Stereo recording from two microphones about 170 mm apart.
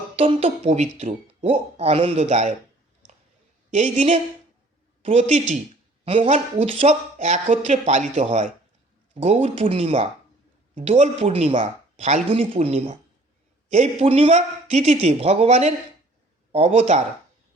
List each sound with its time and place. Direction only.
0.2 s a man's voice: 35° right (ahead or behind)
3.8 s a man's voice: 45° right (ahead or behind)